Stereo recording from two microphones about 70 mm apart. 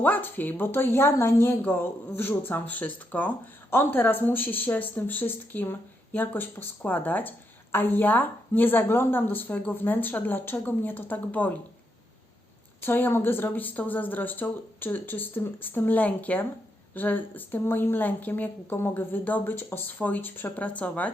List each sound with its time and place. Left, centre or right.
0.0 s a woman's voice: left
12.8 s a woman's voice: left